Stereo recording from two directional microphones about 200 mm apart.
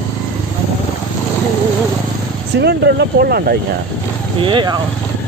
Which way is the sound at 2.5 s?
55° right (ahead or behind).